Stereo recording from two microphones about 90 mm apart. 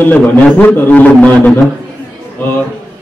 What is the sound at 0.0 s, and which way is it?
A man's voice, 20° left (ahead or behind).